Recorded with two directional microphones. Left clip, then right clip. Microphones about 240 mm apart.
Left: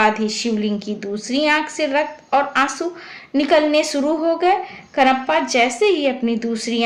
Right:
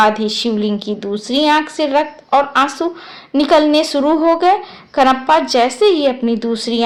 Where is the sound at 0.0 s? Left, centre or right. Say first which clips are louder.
Right 4 dB; right.